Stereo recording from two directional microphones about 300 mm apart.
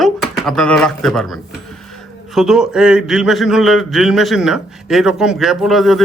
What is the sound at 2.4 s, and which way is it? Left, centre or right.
Speech, centre.